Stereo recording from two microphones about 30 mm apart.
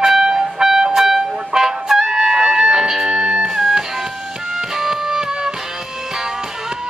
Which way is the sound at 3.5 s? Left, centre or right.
Centre.